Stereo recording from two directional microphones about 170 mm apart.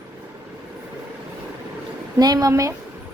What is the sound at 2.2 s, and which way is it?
Speech, 20° right (ahead or behind).